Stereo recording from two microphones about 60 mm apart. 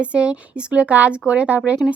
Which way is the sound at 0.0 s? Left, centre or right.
Centre.